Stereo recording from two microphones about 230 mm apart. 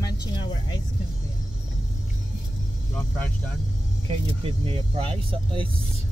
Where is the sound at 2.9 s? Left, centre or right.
Centre.